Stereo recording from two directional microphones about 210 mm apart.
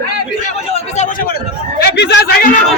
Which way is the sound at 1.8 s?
50° left (ahead or behind).